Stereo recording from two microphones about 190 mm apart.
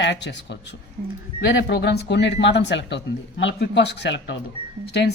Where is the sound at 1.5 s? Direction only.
65° left (ahead or behind).